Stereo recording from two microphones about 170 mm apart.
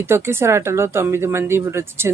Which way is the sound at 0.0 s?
15° right (ahead or behind).